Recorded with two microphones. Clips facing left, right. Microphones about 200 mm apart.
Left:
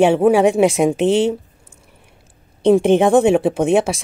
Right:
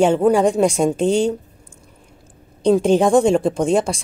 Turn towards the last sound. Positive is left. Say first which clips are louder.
# left 2 dB
turn(degrees=5)  # may be behind; listen again after turning